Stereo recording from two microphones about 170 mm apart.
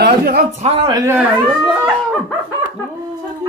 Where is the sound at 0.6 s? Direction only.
35° right (ahead or behind).